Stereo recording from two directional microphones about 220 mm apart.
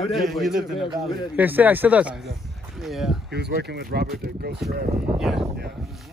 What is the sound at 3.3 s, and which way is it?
Speech, 50° right (ahead or behind).